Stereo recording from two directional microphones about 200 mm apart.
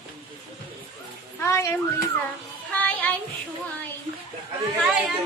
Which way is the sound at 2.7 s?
5° left (ahead or behind).